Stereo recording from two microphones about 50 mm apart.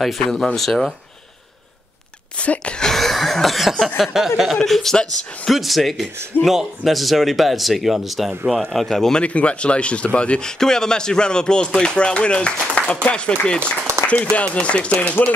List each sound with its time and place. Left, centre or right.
0.0 s speech: centre
2.3 s a sound: left
2.9 s cough: centre
4.0 s speech: centre
4.6 s speech: centre
9.2 s speech: left
10.6 s speech: centre
13.9 s applause: right
14.3 s speech: left